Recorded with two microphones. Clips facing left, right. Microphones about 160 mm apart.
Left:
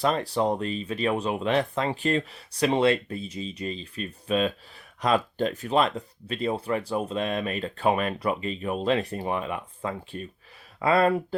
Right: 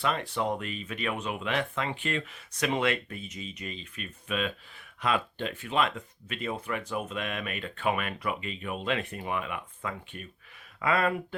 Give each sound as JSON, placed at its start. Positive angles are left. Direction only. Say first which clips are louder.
{"t": 0.0, "sound": "speech", "louder": "left 5 dB", "side_deg": 35}